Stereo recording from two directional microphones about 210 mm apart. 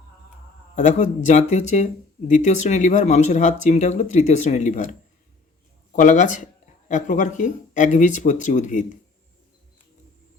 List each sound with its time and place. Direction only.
0.8 s speech: 35° left (ahead or behind)
6.0 s speech: 35° left (ahead or behind)